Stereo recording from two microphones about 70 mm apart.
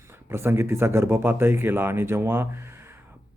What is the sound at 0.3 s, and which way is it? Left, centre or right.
Speech, right.